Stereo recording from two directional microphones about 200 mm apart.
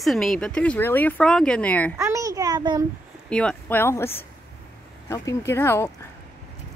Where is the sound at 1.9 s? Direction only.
15° right (ahead or behind).